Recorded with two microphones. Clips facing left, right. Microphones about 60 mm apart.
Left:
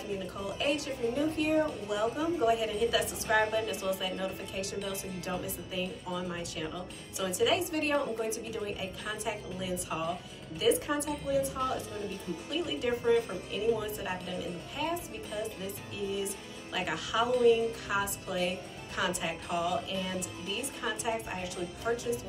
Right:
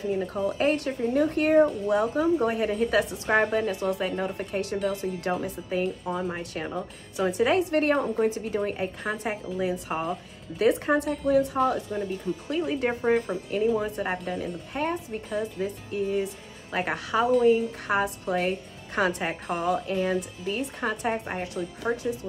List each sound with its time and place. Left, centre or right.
0.2 s a woman's voice: right
12.4 s a woman's voice: right
14.1 s a woman's voice: right
15.2 s a woman's voice: right